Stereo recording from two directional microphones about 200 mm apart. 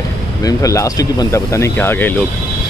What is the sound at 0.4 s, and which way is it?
Speech, 15° left (ahead or behind).